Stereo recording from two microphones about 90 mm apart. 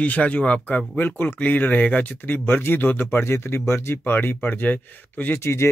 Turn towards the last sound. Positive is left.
turn(degrees=30)  # may be behind; listen again after turning